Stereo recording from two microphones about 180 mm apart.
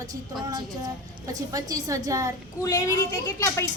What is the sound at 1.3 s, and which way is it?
A woman's voice, 20° right (ahead or behind).